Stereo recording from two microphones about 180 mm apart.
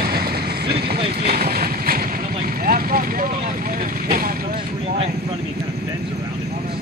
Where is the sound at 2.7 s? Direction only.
55° right (ahead or behind).